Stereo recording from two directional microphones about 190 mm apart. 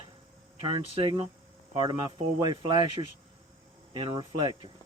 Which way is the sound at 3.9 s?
25° right (ahead or behind).